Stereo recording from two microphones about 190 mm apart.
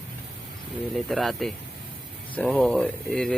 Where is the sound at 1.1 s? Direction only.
Centre (ahead or behind).